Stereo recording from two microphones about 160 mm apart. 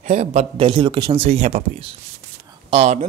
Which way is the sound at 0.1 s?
45° right (ahead or behind).